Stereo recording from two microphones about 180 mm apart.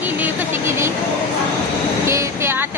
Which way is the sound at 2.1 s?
15° right (ahead or behind).